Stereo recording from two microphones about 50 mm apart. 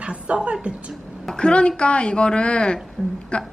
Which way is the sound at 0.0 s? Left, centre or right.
Right.